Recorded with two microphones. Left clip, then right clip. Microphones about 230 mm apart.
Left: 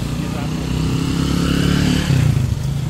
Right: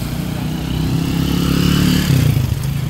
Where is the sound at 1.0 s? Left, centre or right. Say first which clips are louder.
Right 1 dB; right.